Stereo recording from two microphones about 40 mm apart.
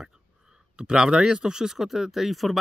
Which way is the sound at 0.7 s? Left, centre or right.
Centre.